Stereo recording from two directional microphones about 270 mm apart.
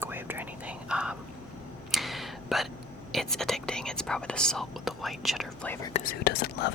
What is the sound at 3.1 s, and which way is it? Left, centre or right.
Speech, centre.